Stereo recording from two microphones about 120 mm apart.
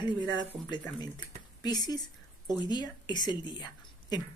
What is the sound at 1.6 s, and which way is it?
A woman's voice, 35° left (ahead or behind).